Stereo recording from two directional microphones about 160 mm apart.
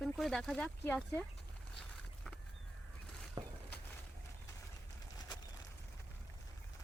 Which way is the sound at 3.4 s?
30° right (ahead or behind).